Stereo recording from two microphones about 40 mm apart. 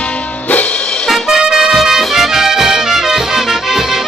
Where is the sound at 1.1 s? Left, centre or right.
Centre.